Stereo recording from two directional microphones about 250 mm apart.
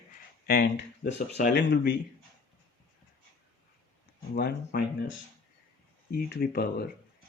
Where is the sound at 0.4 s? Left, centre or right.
Left.